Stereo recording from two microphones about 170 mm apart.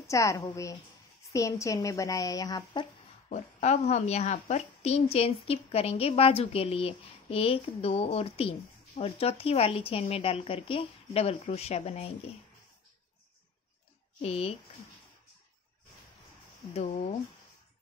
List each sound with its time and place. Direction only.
0.0 s a woman's voice: 20° left (ahead or behind)
3.3 s a woman's voice: 40° left (ahead or behind)
14.2 s a woman's voice: 35° left (ahead or behind)
16.7 s a woman's voice: 40° left (ahead or behind)